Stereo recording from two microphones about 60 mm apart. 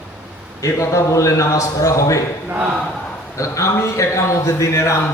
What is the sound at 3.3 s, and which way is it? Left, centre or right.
A man's voice, left.